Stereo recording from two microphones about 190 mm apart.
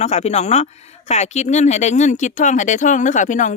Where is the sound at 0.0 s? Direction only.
35° left (ahead or behind).